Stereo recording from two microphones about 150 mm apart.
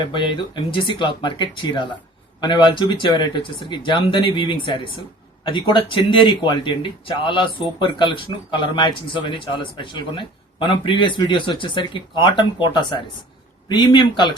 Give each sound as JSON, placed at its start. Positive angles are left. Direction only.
{"t": 0.1, "sound": "a man's voice", "side_deg": 35}